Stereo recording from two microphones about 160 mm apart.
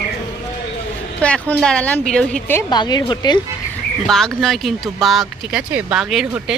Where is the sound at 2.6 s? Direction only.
25° left (ahead or behind).